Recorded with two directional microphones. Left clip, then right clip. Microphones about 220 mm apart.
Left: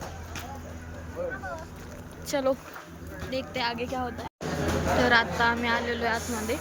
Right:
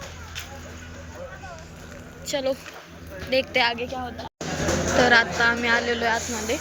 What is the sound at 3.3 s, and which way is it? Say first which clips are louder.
Speech: right 9 dB; 5° left (ahead or behind).